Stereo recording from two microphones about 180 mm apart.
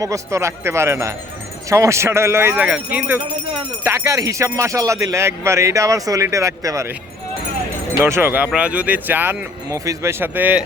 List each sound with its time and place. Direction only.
0.0 s speech: 15° right (ahead or behind)
8.0 s speech: 15° right (ahead or behind)